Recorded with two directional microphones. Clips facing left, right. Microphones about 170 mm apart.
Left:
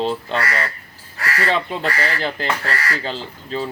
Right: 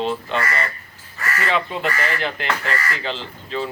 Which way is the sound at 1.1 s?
75° left (ahead or behind).